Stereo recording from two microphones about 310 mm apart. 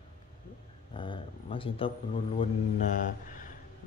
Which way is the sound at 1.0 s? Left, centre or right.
Centre.